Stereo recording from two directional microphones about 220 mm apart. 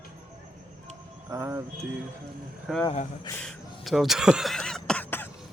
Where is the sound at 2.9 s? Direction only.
25° left (ahead or behind).